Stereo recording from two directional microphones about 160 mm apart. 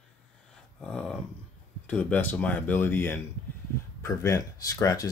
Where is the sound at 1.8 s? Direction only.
10° left (ahead or behind).